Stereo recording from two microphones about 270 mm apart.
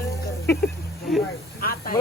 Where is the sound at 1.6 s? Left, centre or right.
Left.